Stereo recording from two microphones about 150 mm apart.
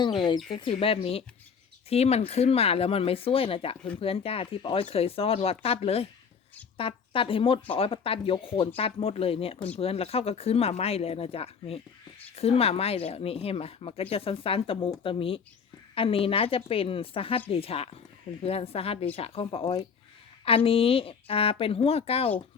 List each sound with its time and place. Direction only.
0.0 s speech: 30° left (ahead or behind)